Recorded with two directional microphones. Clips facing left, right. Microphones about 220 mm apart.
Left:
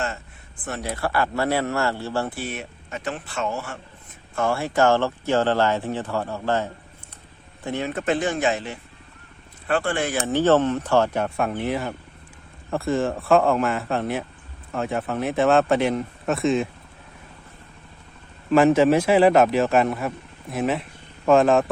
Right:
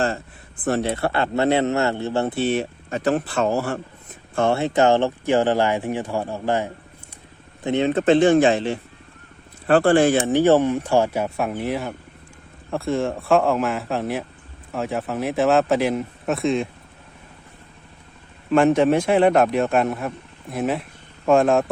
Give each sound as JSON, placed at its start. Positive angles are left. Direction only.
{"t": 0.6, "sound": "speech", "side_deg": -30}
{"t": 4.4, "sound": "speech", "side_deg": -25}
{"t": 10.2, "sound": "speech", "side_deg": -15}
{"t": 18.5, "sound": "speech", "side_deg": 5}